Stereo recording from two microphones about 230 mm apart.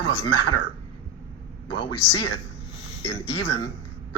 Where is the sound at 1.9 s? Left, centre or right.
Left.